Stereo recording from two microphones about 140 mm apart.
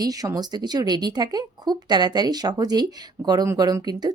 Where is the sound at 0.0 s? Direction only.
25° right (ahead or behind).